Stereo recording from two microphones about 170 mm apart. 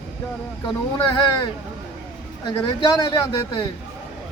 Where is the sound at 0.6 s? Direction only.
30° left (ahead or behind).